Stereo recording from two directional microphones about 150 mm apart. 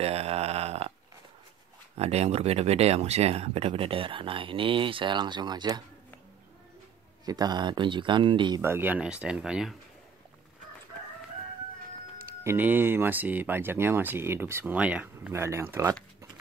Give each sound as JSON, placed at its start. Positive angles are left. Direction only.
{"t": 0.0, "sound": "a sound", "side_deg": -45}
{"t": 2.0, "sound": "speech", "side_deg": -45}
{"t": 7.2, "sound": "speech", "side_deg": -25}
{"t": 8.6, "sound": "speech", "side_deg": -15}
{"t": 12.4, "sound": "speech", "side_deg": -15}